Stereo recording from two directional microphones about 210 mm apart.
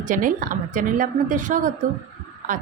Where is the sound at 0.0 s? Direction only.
40° right (ahead or behind).